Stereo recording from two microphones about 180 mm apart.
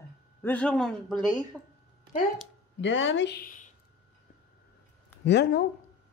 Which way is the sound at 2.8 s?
90° left.